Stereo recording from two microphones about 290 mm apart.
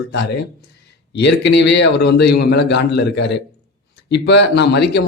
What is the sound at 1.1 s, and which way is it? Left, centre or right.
Speech, left.